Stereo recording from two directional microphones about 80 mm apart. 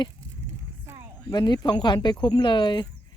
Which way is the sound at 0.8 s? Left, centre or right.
Right.